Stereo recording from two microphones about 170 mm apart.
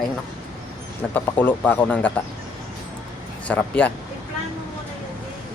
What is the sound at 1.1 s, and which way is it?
Speech, 10° left (ahead or behind).